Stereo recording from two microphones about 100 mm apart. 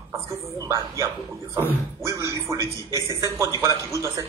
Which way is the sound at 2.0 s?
30° right (ahead or behind).